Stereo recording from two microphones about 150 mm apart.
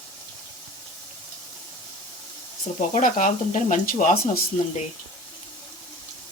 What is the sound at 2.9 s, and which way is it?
Speech, 60° left (ahead or behind).